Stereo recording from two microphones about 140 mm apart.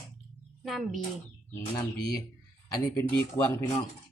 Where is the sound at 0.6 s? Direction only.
Centre (ahead or behind).